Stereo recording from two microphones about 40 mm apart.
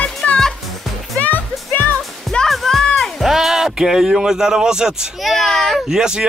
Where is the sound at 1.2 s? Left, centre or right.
Left.